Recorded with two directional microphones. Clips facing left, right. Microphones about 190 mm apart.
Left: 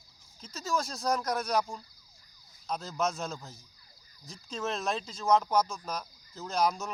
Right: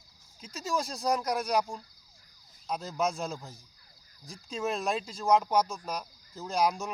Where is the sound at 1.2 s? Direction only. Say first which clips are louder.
Right 1 dB; 15° right (ahead or behind).